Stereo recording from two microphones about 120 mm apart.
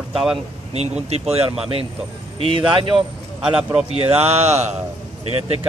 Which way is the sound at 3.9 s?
55° right (ahead or behind).